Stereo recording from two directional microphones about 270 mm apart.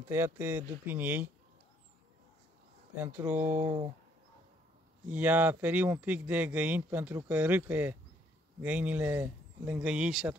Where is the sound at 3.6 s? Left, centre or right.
Centre.